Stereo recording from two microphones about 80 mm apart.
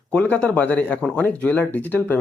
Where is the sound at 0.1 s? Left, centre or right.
Centre.